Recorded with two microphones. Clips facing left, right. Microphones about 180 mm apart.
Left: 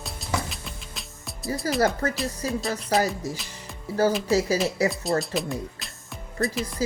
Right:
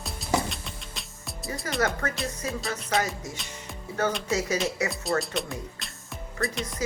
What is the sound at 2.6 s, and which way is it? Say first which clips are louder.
Speech: left 4 dB; centre (ahead or behind).